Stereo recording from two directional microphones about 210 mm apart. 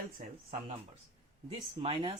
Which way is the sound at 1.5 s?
25° right (ahead or behind).